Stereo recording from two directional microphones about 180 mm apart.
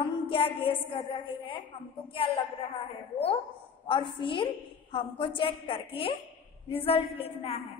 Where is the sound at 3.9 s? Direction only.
30° left (ahead or behind).